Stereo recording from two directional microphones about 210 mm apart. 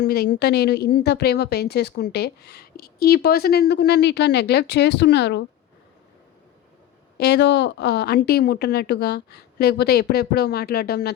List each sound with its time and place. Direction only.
0.0 s a woman's voice: 50° left (ahead or behind)
7.2 s a woman's voice: 55° left (ahead or behind)